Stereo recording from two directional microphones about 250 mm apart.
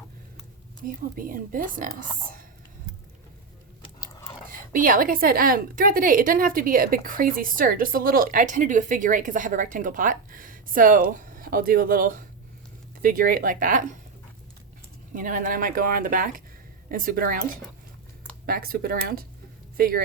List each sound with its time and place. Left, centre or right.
0.9 s a woman's voice: right
3.8 s biting: centre
4.4 s a woman's voice: right
15.1 s a woman's voice: right
18.4 s a woman's voice: right